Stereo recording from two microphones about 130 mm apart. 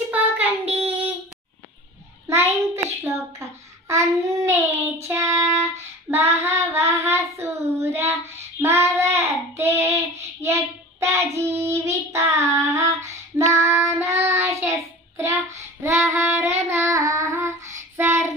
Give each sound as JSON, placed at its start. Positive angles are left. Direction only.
{"t": 0.1, "sound": "child singing", "side_deg": -10}
{"t": 2.2, "sound": "child singing", "side_deg": -20}
{"t": 15.8, "sound": "child singing", "side_deg": -20}